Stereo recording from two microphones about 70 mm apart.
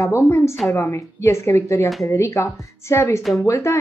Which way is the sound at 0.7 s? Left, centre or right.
Left.